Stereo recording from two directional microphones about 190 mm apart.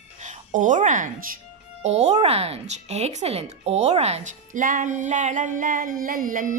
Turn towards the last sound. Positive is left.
turn(degrees=-45)  # may be behind; listen again after turning